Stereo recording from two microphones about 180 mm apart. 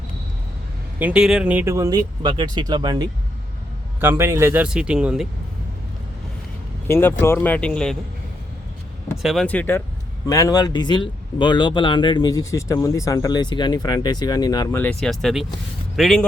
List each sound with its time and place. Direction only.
0.9 s speech: 5° right (ahead or behind); by 3.1 s 25° right (ahead or behind)
4.0 s speech: 10° right (ahead or behind)
6.8 s speech: 15° left (ahead or behind)
9.2 s speech: centre (ahead or behind); by 14.8 s 20° left (ahead or behind)
14.8 s speech: 5° left (ahead or behind)